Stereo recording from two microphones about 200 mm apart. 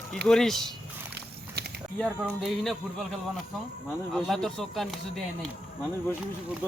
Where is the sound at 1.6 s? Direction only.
55° right (ahead or behind).